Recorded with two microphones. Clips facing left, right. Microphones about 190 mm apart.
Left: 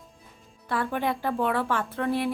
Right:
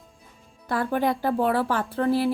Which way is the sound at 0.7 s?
40° right (ahead or behind).